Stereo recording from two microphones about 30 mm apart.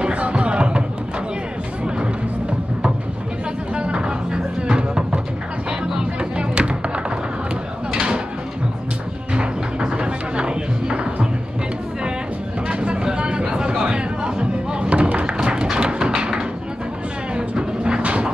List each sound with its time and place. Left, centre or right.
0.0 s music: right
3.7 s music: right
6.3 s music: right
7.9 s drawer open or close: right
9.3 s music: right
12.6 s a sound: right
14.9 s thump: right
15.2 s music: right
16.2 s a sound: right
17.4 s music: right